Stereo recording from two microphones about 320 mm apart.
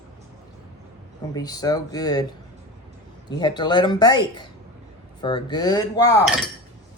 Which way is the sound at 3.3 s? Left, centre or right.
Centre.